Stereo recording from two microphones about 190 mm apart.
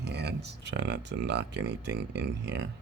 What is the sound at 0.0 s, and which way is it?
Speech, 60° right (ahead or behind).